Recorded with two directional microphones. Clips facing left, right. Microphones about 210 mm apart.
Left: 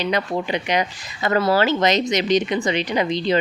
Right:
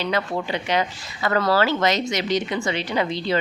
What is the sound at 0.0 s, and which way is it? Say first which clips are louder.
Speech: left 2 dB; 15° left (ahead or behind).